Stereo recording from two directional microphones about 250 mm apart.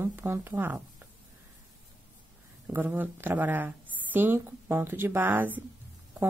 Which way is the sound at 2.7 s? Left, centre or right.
Centre.